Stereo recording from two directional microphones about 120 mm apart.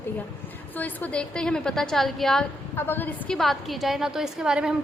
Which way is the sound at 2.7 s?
20° left (ahead or behind).